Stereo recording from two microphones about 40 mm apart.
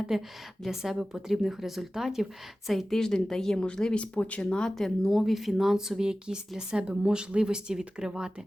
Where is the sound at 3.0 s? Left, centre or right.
Centre.